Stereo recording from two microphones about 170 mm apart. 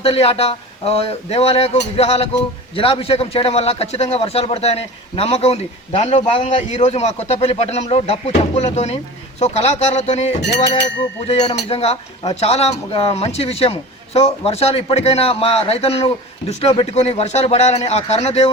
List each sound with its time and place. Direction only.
0.0 s speech: 35° left (ahead or behind)
10.4 s a sound: 80° left
11.3 s speech: 35° left (ahead or behind)